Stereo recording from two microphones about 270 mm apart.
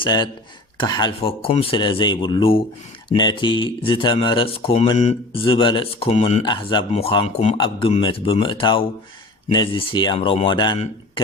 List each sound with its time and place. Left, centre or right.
0.0 s speech: centre